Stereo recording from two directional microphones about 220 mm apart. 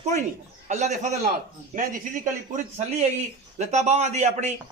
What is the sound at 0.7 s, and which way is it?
A man's voice, 35° right (ahead or behind).